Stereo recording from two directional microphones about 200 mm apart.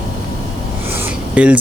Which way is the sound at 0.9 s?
5° right (ahead or behind).